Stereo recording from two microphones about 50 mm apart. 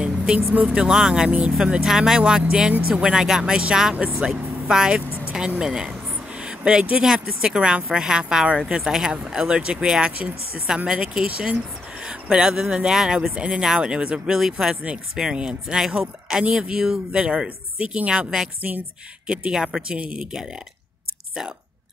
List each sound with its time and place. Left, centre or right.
0.0 s vehicle: centre
0.7 s a woman's voice: centre
6.3 s a sound: centre
7.0 s a woman's voice: centre
11.2 s speech: right
12.0 s a woman's voice: centre
20.0 s speech: right